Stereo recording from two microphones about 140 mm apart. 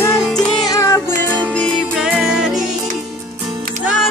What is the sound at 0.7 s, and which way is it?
Music, 20° left (ahead or behind).